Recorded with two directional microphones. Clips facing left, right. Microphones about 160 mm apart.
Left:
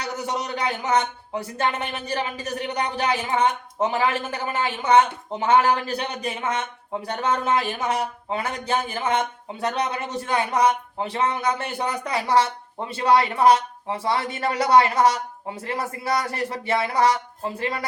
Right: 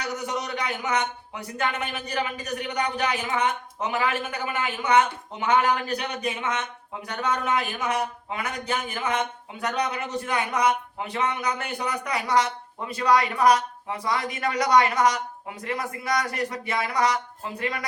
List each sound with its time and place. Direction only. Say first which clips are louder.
0.0 s speech: left 2 dB; 30° left (ahead or behind)